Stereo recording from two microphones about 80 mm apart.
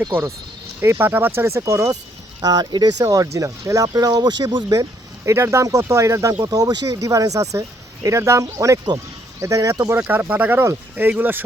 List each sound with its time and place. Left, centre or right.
0.8 s speech: right
2.4 s speech: right
3.8 s speech: right
6.4 s speech: right
9.9 s speech: right